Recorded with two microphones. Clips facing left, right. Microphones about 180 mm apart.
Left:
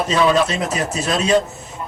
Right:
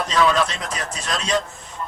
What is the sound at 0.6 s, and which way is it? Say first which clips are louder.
Speech: left 8 dB; 5° left (ahead or behind).